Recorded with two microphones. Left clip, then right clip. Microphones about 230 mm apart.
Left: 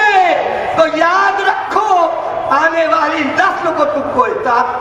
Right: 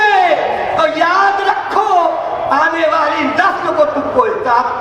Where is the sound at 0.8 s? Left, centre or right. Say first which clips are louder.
Left 1 dB; left.